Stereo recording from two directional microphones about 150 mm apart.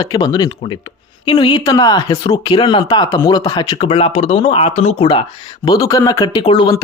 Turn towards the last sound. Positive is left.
turn(degrees=35)  # may be behind; listen again after turning